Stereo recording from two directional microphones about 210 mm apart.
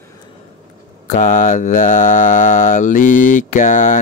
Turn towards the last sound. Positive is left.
turn(degrees=35)  # may be behind; listen again after turning